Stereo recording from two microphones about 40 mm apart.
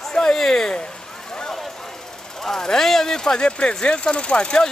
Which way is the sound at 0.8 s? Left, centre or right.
Centre.